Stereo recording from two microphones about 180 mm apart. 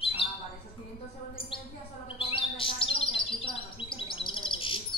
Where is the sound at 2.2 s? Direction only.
30° left (ahead or behind).